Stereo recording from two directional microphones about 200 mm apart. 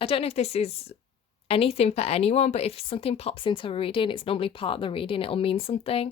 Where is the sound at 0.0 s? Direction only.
30° left (ahead or behind).